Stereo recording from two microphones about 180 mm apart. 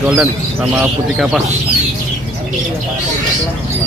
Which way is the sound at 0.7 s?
5° right (ahead or behind).